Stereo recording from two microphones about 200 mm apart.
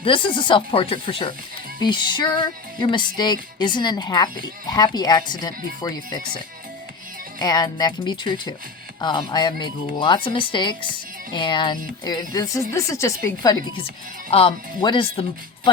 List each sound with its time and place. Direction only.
0.0 s speech: 25° left (ahead or behind)
7.3 s speech: 20° left (ahead or behind)